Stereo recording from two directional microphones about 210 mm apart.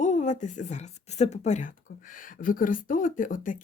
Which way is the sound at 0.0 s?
35° left (ahead or behind).